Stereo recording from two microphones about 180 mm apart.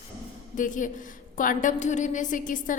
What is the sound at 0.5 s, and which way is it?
A woman's voice, 45° left (ahead or behind).